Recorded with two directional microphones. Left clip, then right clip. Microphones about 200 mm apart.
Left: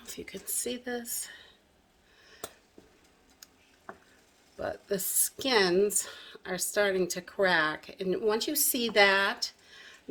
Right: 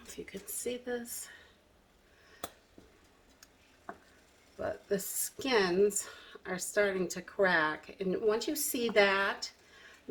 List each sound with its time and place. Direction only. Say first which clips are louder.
0.0 s speech: left 3 dB; 50° left (ahead or behind)
4.5 s speech: left 1 dB; 40° left (ahead or behind)